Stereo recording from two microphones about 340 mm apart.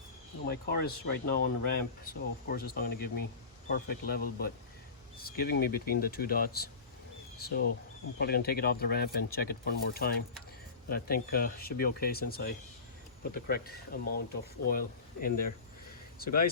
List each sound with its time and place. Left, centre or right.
0.4 s speech: left